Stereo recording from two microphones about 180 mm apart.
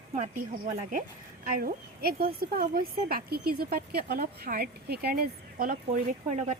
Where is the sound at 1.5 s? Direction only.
50° right (ahead or behind).